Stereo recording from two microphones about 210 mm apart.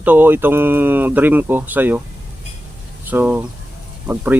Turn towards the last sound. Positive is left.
turn(degrees=-10)  # may be behind; listen again after turning